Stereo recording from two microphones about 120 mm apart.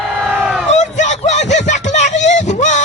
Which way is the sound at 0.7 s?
80° left.